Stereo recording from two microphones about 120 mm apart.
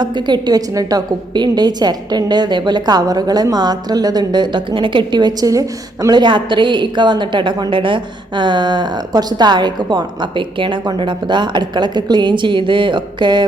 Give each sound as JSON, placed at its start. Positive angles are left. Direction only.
{"t": 0.0, "sound": "a woman's voice", "side_deg": -35}